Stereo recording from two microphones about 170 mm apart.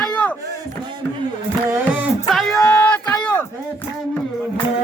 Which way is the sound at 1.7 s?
10° right (ahead or behind).